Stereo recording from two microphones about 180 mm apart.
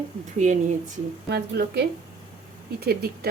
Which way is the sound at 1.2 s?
65° right (ahead or behind).